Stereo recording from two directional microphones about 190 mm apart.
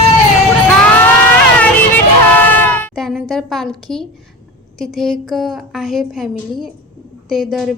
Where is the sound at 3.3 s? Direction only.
Centre (ahead or behind).